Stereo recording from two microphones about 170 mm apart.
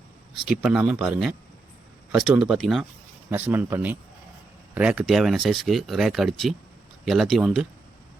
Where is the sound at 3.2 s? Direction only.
10° right (ahead or behind).